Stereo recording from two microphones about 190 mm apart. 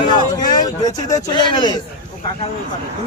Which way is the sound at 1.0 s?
20° left (ahead or behind).